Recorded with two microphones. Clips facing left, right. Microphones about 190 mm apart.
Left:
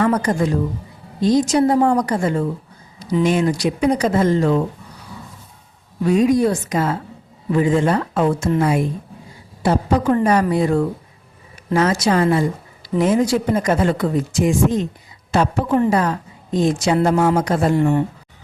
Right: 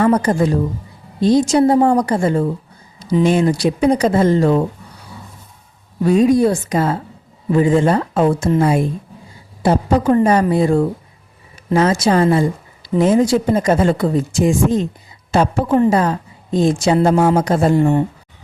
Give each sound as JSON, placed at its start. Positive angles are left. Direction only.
{"t": 0.0, "sound": "speech", "side_deg": -30}
{"t": 6.0, "sound": "speech", "side_deg": -30}